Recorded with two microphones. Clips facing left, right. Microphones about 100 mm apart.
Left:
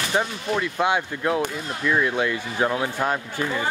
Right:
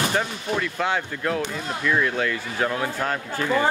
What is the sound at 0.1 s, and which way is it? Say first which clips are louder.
Speech: left 1 dB; 15° left (ahead or behind).